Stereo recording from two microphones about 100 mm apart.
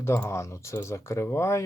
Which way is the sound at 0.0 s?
25° left (ahead or behind).